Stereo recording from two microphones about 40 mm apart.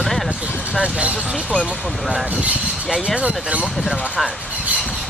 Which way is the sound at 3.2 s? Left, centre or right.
Right.